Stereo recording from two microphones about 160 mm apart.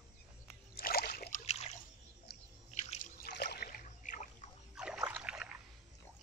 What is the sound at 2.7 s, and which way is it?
Drip, 50° left (ahead or behind).